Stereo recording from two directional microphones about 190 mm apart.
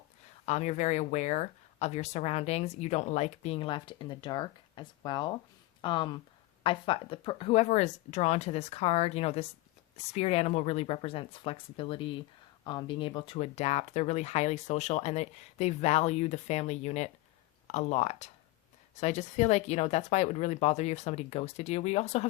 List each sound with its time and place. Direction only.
0.4 s speech: 35° left (ahead or behind)